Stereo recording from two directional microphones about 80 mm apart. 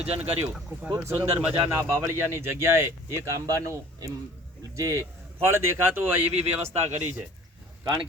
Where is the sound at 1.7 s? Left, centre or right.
Right.